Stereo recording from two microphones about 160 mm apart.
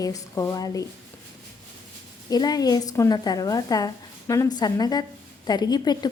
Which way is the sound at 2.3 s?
25° left (ahead or behind).